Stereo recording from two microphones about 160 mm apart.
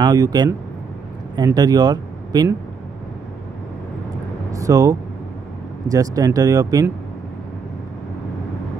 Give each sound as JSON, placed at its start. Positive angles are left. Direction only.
{"t": 0.0, "sound": "speech", "side_deg": -25}
{"t": 4.5, "sound": "vehicle", "side_deg": -20}
{"t": 5.9, "sound": "speech", "side_deg": -20}